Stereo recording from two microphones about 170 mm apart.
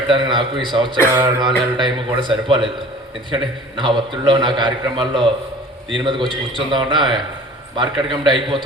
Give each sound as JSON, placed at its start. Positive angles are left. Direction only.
{"t": 0.1, "sound": "a man's voice", "side_deg": -30}